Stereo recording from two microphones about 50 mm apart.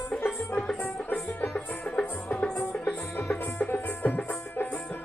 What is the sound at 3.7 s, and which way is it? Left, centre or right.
Music, left.